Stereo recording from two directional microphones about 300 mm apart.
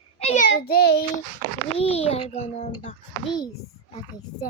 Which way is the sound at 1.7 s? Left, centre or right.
Centre.